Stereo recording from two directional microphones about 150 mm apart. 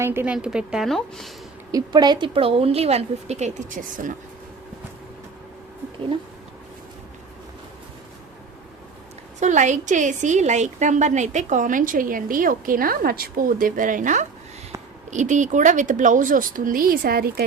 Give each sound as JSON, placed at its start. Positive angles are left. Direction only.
{"t": 0.0, "sound": "a woman's voice", "side_deg": -15}
{"t": 1.7, "sound": "speech", "side_deg": -30}
{"t": 9.4, "sound": "a woman's voice", "side_deg": -55}